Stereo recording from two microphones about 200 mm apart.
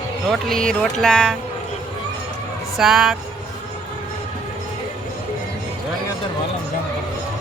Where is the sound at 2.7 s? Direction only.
Centre (ahead or behind).